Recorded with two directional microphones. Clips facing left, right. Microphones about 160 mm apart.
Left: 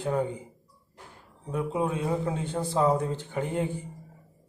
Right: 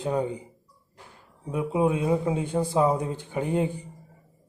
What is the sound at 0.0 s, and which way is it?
Speech, 15° right (ahead or behind).